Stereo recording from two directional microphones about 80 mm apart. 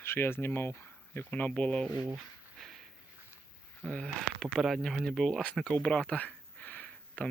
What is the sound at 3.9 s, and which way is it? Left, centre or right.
Speech, centre.